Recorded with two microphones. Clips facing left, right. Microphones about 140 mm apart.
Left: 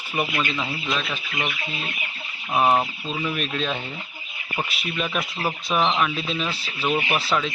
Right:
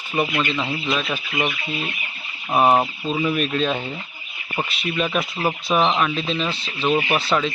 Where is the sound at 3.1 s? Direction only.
5° right (ahead or behind).